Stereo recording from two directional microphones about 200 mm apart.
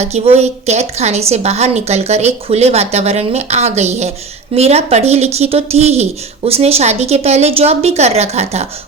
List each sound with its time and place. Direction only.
0.0 s a woman's voice: 35° right (ahead or behind)